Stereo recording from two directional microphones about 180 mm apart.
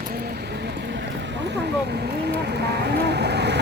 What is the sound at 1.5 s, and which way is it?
Vehicle, 65° right (ahead or behind).